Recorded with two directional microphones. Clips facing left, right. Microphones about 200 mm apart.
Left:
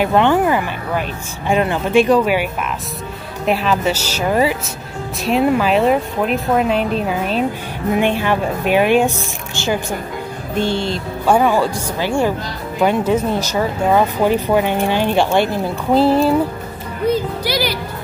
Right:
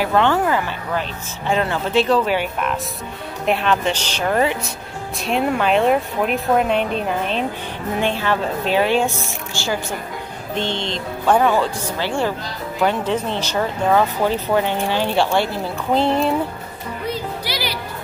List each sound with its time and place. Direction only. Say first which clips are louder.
0.0 s speech: left 3 dB; 15° left (ahead or behind)
8.0 s speech: left 2 dB; 15° left (ahead or behind)
16.0 s speech: left 5 dB; 5° left (ahead or behind)
17.1 s speech: left 8 dB; 45° left (ahead or behind)